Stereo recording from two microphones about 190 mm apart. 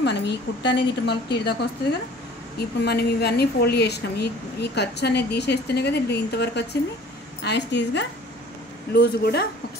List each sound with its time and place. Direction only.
0.0 s a woman's voice: 65° left (ahead or behind)